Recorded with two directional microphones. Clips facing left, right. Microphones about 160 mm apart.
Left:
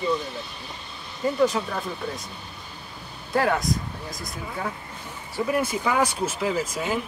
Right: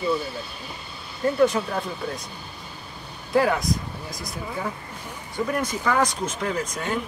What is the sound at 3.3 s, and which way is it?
Speech, centre (ahead or behind).